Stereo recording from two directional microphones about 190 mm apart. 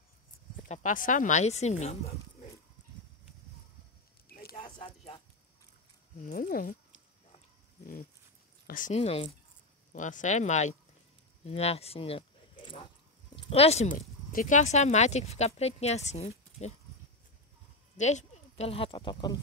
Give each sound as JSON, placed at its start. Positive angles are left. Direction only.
{"t": 0.7, "sound": "speech", "side_deg": 45}
{"t": 4.3, "sound": "a sound", "side_deg": 55}
{"t": 4.6, "sound": "clip-clop", "side_deg": 25}
{"t": 6.2, "sound": "speech", "side_deg": 45}
{"t": 8.6, "sound": "speech", "side_deg": 45}
{"t": 17.9, "sound": "speech", "side_deg": 35}